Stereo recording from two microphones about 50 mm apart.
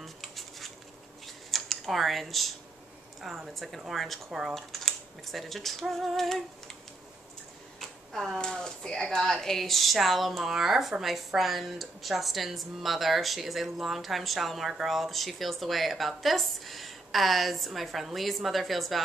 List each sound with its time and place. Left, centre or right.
0.0 s dishes: centre
1.2 s a sound: centre
3.2 s speech: centre
4.3 s speech: centre
4.6 s speech: centre
8.1 s speech: centre